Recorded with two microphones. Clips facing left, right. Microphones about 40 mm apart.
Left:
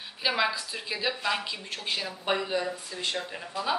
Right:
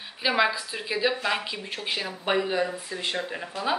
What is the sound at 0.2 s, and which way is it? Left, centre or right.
Speech, centre.